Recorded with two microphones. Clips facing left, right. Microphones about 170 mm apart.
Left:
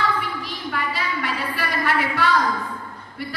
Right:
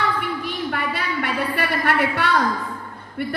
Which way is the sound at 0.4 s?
60° right (ahead or behind).